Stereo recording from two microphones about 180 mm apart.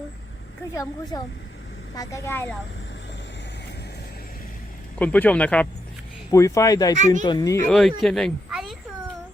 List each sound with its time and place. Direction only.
0.7 s speech: 15° left (ahead or behind)
4.9 s speech: 10° left (ahead or behind)
6.3 s speech: 15° left (ahead or behind)
6.9 s speech: 40° right (ahead or behind)
7.3 s speech: 20° left (ahead or behind)
7.7 s speech: 5° left (ahead or behind)
8.4 s a sound: 5° right (ahead or behind)